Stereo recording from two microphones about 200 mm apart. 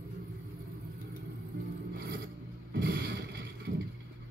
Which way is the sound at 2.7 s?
50° right (ahead or behind).